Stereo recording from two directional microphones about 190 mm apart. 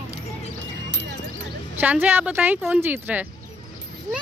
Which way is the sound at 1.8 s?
10° right (ahead or behind).